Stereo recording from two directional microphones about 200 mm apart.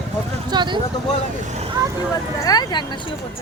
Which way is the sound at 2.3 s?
20° left (ahead or behind).